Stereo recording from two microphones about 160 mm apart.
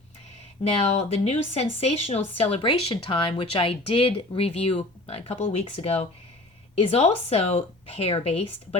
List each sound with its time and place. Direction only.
0.8 s speech: 40° left (ahead or behind)